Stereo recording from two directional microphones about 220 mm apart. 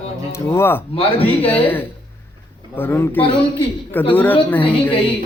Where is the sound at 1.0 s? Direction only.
25° left (ahead or behind).